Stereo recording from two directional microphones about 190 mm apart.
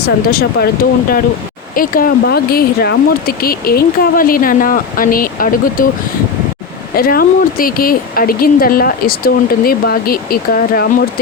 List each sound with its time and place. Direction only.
0.0 s speech: 55° left (ahead or behind)
1.7 s speech: 50° left (ahead or behind)
6.9 s speech: 50° left (ahead or behind)